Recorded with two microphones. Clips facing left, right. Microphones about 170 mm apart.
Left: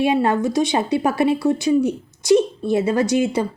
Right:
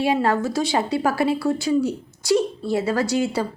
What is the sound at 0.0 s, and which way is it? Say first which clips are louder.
A woman's voice: left 2 dB; 20° left (ahead or behind).